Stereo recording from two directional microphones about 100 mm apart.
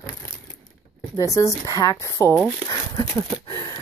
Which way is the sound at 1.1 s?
35° left (ahead or behind).